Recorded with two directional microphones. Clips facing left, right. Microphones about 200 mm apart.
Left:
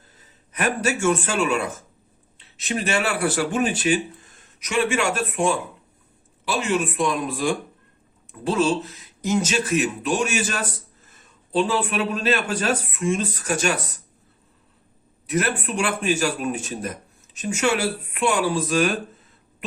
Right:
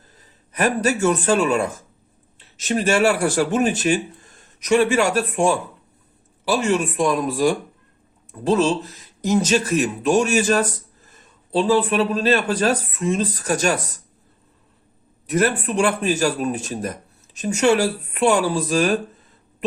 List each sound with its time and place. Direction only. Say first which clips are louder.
0.2 s a man's voice: right 5 dB; 40° right (ahead or behind)
15.3 s speech: right 4 dB; 40° right (ahead or behind)